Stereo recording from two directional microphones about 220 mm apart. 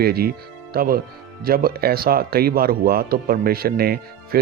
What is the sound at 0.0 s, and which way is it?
Speech, 45° right (ahead or behind).